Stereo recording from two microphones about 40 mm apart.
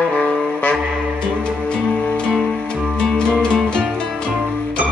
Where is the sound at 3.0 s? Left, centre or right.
Left.